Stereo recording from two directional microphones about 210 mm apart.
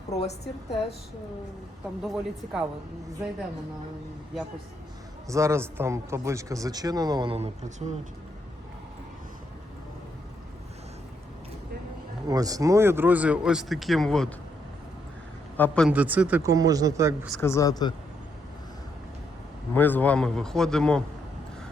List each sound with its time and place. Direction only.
0.1 s a woman's voice: 30° left (ahead or behind)
0.4 s a woman's voice: 50° left (ahead or behind)
2.0 s a man's voice: 5° right (ahead or behind)
5.3 s a man's voice: 15° right (ahead or behind); by 7.9 s 30° right (ahead or behind)
12.3 s a man's voice: 15° right (ahead or behind); by 14.3 s 5° left (ahead or behind)
15.5 s speech: 5° left (ahead or behind)
15.9 s a man's voice: 5° right (ahead or behind)
17.4 s speech: 15° left (ahead or behind)
19.7 s a man's voice: 10° left (ahead or behind)